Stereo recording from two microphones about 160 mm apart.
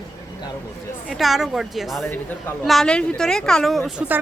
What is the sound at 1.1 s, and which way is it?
A woman's voice, centre (ahead or behind).